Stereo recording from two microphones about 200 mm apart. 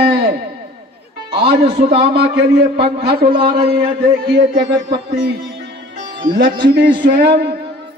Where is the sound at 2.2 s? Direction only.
55° right (ahead or behind).